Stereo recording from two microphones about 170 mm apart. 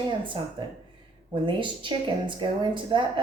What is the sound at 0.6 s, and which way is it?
A woman's voice, 30° right (ahead or behind).